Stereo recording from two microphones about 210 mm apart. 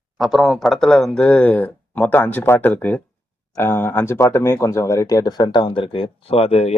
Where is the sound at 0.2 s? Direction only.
Centre (ahead or behind).